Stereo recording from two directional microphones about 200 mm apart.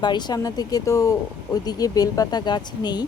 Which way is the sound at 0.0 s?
20° left (ahead or behind).